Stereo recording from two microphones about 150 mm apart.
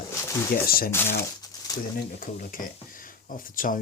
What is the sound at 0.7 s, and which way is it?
Speech, 80° left.